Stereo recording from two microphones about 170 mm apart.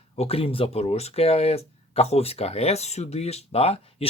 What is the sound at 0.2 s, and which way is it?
Speech, 35° left (ahead or behind).